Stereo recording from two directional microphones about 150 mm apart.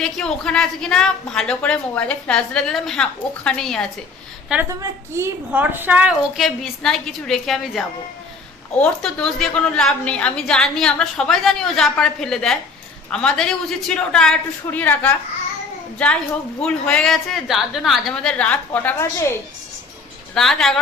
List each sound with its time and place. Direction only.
0.0 s a woman's voice: 5° left (ahead or behind)
4.7 s a woman's voice: 20° right (ahead or behind); by 15.1 s 10° left (ahead or behind)
16.6 s a woman's voice: 5° left (ahead or behind)
20.3 s a woman's voice: 5° left (ahead or behind)